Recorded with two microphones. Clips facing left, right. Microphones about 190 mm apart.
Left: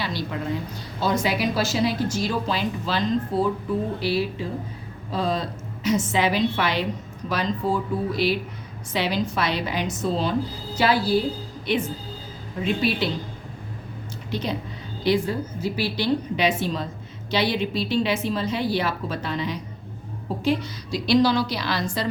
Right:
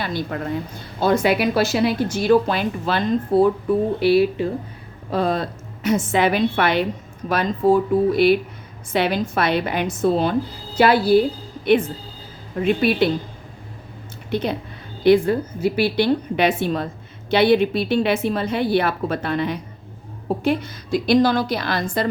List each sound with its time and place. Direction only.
0.0 s a woman's voice: 50° right (ahead or behind)
12.6 s speech: 55° right (ahead or behind)
14.3 s a woman's voice: 55° right (ahead or behind)